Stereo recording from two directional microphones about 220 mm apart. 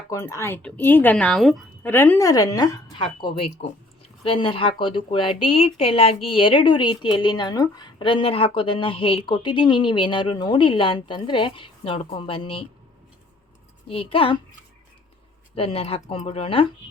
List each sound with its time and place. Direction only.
0.1 s a woman's voice: 15° left (ahead or behind)
13.8 s a woman's voice: 25° left (ahead or behind)
15.5 s a woman's voice: 25° left (ahead or behind)